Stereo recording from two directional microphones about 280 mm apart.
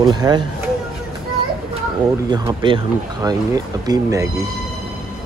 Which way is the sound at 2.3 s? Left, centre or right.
Centre.